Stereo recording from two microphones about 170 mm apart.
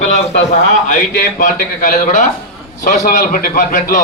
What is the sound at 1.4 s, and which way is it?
A man's voice, 50° left (ahead or behind).